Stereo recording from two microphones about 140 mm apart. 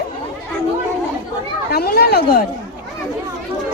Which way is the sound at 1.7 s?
90° left.